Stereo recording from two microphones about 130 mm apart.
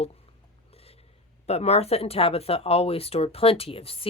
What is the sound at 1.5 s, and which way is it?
A man's voice, 50° left (ahead or behind).